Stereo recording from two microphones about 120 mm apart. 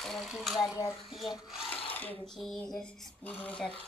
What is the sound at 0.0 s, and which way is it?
Speech, centre (ahead or behind).